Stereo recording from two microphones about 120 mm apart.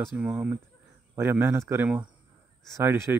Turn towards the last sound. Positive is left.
turn(degrees=-20)  # may be behind; listen again after turning